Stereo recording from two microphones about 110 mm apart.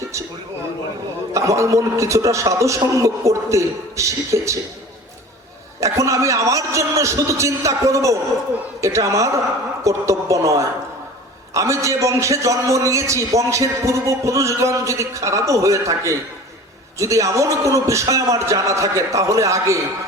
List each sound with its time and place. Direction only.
1.3 s a man's voice: 30° right (ahead or behind)
5.8 s a man's voice: 30° right (ahead or behind)